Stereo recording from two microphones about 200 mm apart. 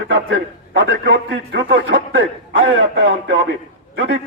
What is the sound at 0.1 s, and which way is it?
A man's voice, 75° right (ahead or behind).